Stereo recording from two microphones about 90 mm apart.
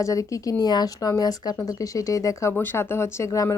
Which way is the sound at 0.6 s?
50° left (ahead or behind).